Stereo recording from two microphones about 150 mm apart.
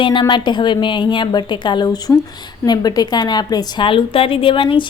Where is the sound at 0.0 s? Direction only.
30° left (ahead or behind).